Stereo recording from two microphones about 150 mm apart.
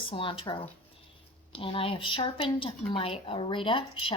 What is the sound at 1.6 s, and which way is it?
Speech, 35° left (ahead or behind).